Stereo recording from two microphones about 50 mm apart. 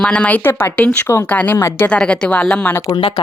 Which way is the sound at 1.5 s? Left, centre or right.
Left.